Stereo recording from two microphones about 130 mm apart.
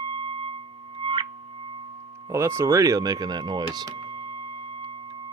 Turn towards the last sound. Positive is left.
turn(degrees=-30)  # may be behind; listen again after turning